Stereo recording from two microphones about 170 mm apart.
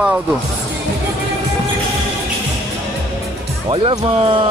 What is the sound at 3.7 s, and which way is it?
Speech, 30° right (ahead or behind).